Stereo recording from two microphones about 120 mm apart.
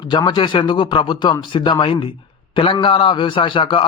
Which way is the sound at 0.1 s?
40° left (ahead or behind).